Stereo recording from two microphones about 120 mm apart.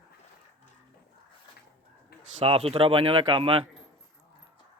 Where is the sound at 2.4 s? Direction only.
55° right (ahead or behind).